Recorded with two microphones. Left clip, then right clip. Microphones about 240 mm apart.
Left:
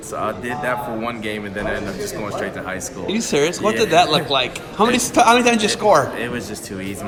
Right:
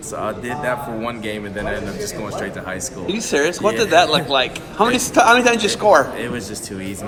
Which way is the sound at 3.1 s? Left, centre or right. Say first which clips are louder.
Even; left.